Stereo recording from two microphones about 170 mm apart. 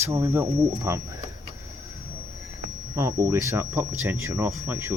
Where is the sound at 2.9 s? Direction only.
20° right (ahead or behind).